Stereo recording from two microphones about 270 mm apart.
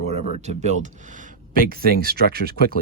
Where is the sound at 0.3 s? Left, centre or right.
Right.